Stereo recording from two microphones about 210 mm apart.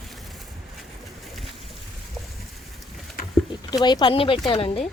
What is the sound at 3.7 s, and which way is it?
Speech, 20° left (ahead or behind).